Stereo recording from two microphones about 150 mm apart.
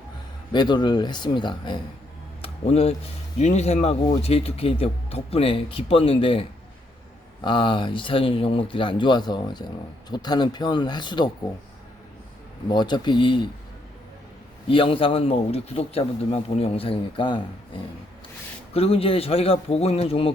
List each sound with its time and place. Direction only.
0.5 s speech: 30° left (ahead or behind)
2.4 s a sound: 45° left (ahead or behind)
3.3 s speech: 50° left (ahead or behind)
7.4 s speech: 35° left (ahead or behind)
12.7 s speech: 30° left (ahead or behind)
14.7 s speech: 35° left (ahead or behind)
18.7 s speech: 40° left (ahead or behind)